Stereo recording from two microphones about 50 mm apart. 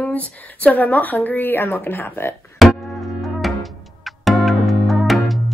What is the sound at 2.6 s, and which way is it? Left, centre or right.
Music, centre.